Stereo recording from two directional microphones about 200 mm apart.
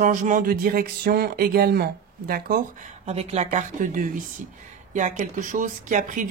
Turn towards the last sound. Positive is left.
turn(degrees=-40)  # may be behind; listen again after turning